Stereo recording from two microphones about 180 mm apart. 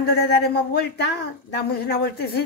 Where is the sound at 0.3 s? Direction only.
65° left (ahead or behind).